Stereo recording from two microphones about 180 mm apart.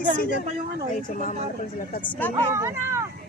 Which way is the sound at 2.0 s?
10° left (ahead or behind).